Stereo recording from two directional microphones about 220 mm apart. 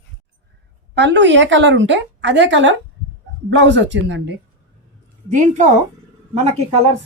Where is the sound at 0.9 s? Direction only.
55° right (ahead or behind).